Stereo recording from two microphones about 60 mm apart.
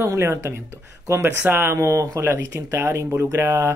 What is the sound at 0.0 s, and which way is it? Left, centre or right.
Speech, right.